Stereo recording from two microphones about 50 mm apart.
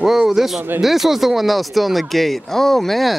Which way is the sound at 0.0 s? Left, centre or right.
Centre.